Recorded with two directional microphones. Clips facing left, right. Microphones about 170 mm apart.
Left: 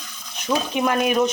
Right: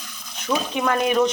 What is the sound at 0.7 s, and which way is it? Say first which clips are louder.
Speech: even; 20° left (ahead or behind).